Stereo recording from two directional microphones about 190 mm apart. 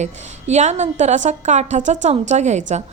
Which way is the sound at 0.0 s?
35° right (ahead or behind).